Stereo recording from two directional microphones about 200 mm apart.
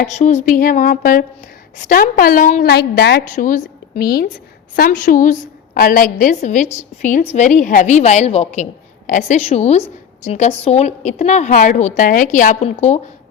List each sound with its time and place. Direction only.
0.1 s a woman's voice: 35° left (ahead or behind)
2.6 s a woman's voice: 55° left (ahead or behind)
3.3 s a woman's voice: 40° left (ahead or behind)